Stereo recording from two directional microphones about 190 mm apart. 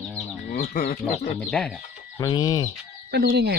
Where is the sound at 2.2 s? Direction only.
20° left (ahead or behind).